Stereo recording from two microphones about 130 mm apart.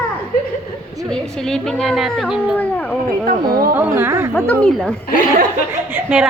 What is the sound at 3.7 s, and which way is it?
Speech, 15° right (ahead or behind).